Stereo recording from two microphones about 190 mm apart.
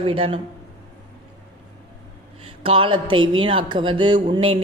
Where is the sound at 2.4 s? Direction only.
30° right (ahead or behind).